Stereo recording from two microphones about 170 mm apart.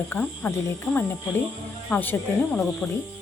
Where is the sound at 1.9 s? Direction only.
10° left (ahead or behind).